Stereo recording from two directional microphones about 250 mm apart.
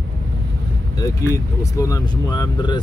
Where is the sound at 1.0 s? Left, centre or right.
Centre.